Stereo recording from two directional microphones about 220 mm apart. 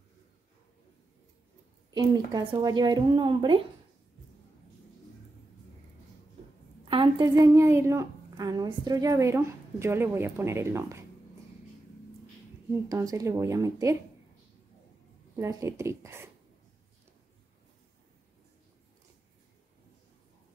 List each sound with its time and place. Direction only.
2.0 s speech: 20° right (ahead or behind)
6.8 s a woman's voice: 25° right (ahead or behind)
12.8 s a woman's voice: 15° right (ahead or behind)
15.3 s a woman's voice: 15° right (ahead or behind)